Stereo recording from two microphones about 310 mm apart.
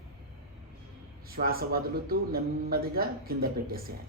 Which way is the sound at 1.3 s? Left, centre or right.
Right.